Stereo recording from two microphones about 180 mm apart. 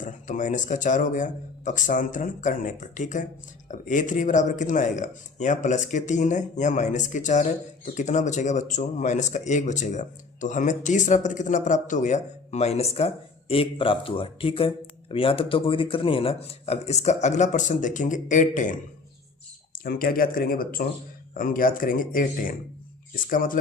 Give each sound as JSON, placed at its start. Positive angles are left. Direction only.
{"t": 0.0, "sound": "speech", "side_deg": 45}